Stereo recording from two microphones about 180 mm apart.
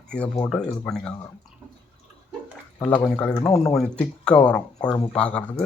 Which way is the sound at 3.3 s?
30° left (ahead or behind).